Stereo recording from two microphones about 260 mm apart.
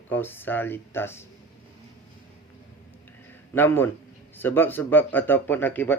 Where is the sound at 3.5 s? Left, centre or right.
Centre.